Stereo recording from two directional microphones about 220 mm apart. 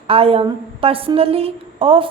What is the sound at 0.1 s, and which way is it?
A woman's voice, 25° right (ahead or behind).